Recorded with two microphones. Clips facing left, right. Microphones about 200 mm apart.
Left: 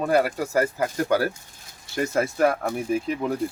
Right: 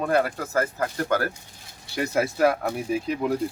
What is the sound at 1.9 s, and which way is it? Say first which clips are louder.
Speech: left 1 dB; centre (ahead or behind).